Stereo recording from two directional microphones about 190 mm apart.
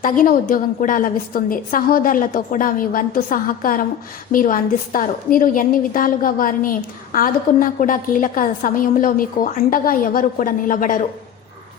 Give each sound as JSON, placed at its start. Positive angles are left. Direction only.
{"t": 0.0, "sound": "a woman's voice", "side_deg": 45}